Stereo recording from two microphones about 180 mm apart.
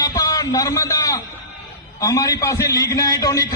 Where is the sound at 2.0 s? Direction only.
20° left (ahead or behind).